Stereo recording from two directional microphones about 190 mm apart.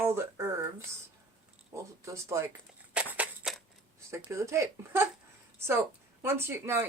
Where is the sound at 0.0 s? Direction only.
15° right (ahead or behind).